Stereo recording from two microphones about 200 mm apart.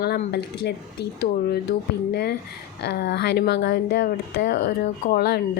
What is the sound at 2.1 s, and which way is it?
Speech, 55° left (ahead or behind).